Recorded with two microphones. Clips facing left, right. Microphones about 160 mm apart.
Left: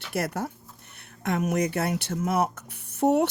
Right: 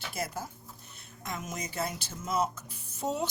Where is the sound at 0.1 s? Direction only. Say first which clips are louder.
Left 9 dB; 70° left (ahead or behind).